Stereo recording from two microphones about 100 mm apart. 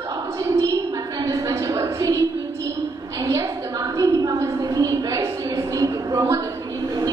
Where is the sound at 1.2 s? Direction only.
35° right (ahead or behind).